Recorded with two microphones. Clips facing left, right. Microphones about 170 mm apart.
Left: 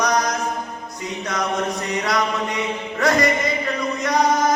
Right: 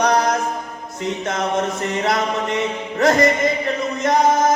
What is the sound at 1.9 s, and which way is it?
Music, 50° right (ahead or behind).